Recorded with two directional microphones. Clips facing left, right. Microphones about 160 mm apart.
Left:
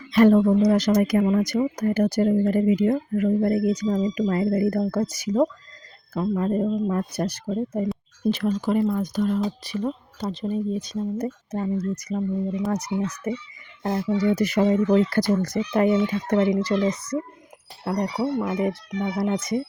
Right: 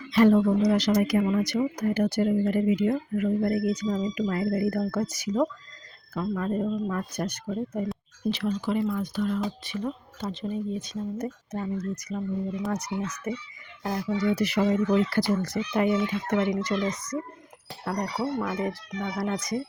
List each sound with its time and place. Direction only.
0.1 s speech: 50° left (ahead or behind); by 7.9 s 30° left (ahead or behind)
8.3 s speech: 45° left (ahead or behind); by 14.1 s 25° left (ahead or behind)
14.2 s speech: 40° left (ahead or behind)
16.3 s speech: 30° left (ahead or behind)
17.8 s speech: 20° left (ahead or behind)